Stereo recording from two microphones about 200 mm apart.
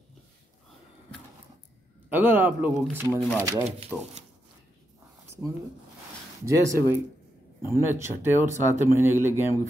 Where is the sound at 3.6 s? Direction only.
30° right (ahead or behind).